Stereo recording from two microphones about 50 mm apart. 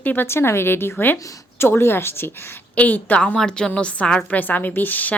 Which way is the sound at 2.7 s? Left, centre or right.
Left.